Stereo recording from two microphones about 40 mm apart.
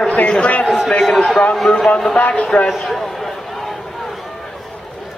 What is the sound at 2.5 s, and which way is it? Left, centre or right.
Speech, left.